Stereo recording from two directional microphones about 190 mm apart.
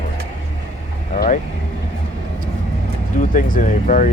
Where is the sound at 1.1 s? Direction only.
45° left (ahead or behind).